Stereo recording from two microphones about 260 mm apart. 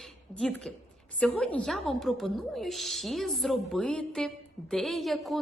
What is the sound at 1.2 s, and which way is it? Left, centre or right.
A woman's voice, centre.